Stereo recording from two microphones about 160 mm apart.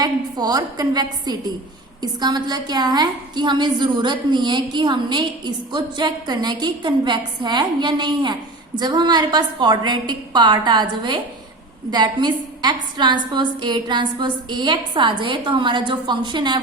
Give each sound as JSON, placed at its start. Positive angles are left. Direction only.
{"t": 0.0, "sound": "a woman's voice", "side_deg": -25}